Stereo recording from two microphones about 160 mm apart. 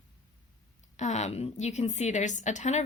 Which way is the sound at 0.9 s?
45° left (ahead or behind).